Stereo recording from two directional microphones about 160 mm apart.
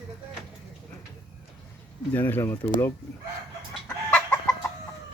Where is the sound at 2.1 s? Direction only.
10° left (ahead or behind).